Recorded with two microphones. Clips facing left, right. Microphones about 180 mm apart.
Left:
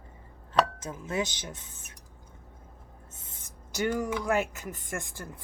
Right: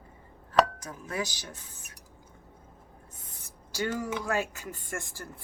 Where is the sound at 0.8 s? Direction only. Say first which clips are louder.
Left 3 dB; 25° left (ahead or behind).